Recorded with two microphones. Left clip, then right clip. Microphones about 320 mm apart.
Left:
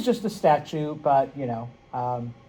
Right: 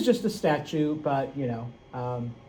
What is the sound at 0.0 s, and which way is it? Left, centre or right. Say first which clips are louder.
Speech: left 2 dB; centre.